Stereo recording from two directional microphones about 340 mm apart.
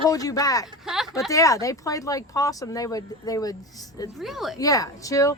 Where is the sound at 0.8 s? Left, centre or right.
Centre.